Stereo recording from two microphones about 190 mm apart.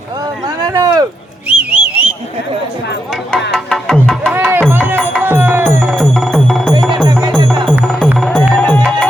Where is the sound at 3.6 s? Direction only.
Centre (ahead or behind).